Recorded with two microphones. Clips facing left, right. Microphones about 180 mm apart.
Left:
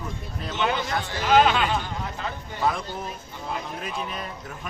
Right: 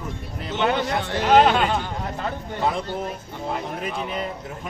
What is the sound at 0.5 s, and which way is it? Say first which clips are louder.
Speech: right 4 dB; 60° right (ahead or behind).